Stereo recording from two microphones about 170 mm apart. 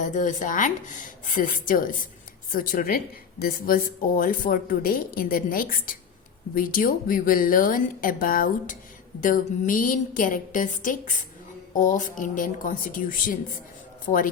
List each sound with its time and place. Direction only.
0.0 s a woman's voice: 50° left (ahead or behind)